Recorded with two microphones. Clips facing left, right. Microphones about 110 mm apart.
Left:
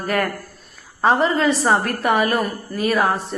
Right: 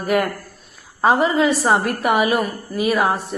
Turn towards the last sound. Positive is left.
turn(degrees=-15)  # may be behind; listen again after turning